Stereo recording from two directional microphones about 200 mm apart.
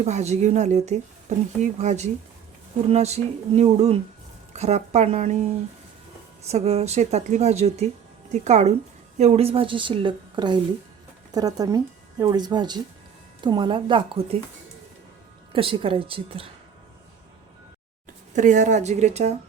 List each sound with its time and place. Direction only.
0.0 s speech: 35° right (ahead or behind)
6.5 s a woman's voice: 30° right (ahead or behind)
15.5 s a woman's voice: 25° right (ahead or behind)
18.3 s speech: 40° right (ahead or behind)